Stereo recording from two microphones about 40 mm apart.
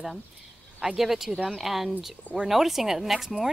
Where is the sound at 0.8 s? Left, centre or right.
Centre.